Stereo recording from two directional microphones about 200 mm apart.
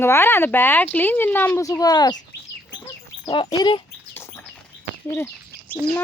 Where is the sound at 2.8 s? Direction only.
20° left (ahead or behind).